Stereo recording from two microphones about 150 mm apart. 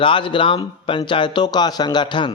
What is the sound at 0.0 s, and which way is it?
A man's voice, 35° left (ahead or behind).